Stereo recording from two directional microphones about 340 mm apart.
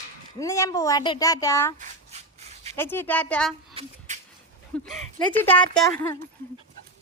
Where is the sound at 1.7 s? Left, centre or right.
Centre.